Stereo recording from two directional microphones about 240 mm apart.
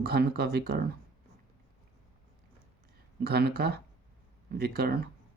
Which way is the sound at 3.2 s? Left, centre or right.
Right.